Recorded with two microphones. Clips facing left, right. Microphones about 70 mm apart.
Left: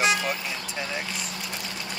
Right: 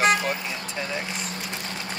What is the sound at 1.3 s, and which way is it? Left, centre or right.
Vehicle, right.